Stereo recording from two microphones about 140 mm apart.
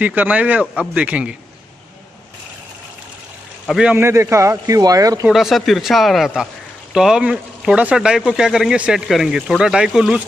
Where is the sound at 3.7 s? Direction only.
10° right (ahead or behind); by 5.3 s 25° right (ahead or behind).